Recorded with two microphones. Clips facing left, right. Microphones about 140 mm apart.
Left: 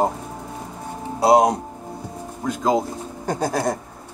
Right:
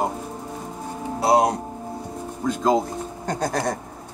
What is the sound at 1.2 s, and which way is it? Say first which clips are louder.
Speech: left 3 dB; 25° left (ahead or behind).